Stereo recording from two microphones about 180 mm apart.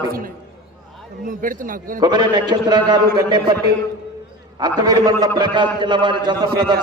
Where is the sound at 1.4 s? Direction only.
50° right (ahead or behind).